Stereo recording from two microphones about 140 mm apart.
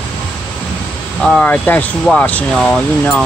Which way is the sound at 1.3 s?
10° left (ahead or behind).